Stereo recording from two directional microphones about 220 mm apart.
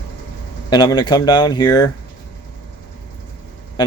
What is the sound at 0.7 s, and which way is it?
Speech, 20° left (ahead or behind).